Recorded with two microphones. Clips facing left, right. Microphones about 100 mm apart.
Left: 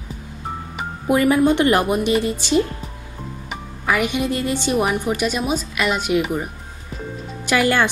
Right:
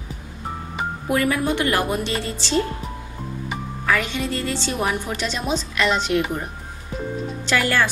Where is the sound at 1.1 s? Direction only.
20° left (ahead or behind).